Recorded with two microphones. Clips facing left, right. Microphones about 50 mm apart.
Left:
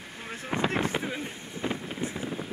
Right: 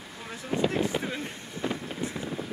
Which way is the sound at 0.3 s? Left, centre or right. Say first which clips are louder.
Right 1 dB; left.